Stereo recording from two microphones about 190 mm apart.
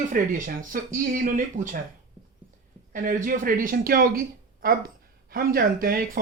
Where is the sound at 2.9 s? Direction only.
45° right (ahead or behind).